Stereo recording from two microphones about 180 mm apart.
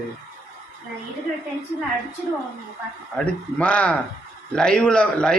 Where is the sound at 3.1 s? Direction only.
5° left (ahead or behind).